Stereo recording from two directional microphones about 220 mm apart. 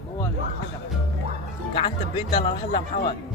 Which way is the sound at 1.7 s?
25° left (ahead or behind).